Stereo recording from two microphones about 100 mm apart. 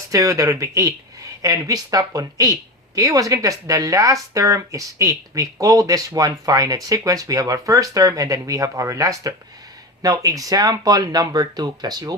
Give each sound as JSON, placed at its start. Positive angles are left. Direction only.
{"t": 0.1, "sound": "speech", "side_deg": -35}